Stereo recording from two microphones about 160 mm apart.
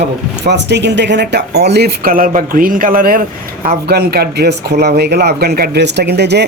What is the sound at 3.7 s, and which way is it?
Speech, 80° right.